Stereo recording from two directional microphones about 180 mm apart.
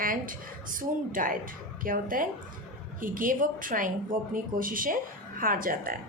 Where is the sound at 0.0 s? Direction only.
50° right (ahead or behind).